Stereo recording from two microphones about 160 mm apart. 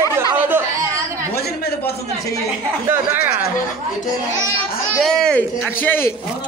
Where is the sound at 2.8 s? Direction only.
15° right (ahead or behind).